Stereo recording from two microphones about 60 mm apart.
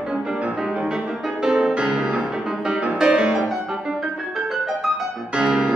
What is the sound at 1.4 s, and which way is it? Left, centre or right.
Music, centre.